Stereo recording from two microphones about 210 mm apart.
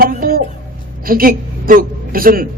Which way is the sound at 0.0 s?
45° right (ahead or behind).